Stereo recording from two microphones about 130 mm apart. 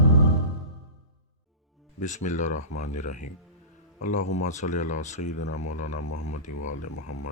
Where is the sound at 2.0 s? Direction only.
70° left (ahead or behind).